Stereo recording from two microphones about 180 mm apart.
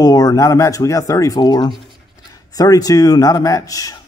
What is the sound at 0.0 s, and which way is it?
Speech, 20° left (ahead or behind).